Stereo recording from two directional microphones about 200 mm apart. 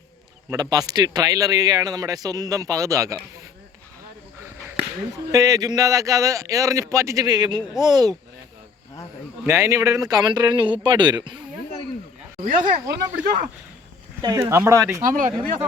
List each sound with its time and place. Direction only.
0.5 s speech: 20° right (ahead or behind)
5.3 s a man's voice: 15° right (ahead or behind)
9.5 s speech: 15° right (ahead or behind)
12.4 s speech: 40° right (ahead or behind)
14.2 s a man's voice: 20° right (ahead or behind)
15.0 s speech: 40° right (ahead or behind)